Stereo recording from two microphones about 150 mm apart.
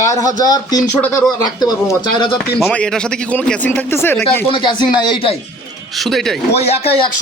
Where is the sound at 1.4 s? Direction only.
25° left (ahead or behind).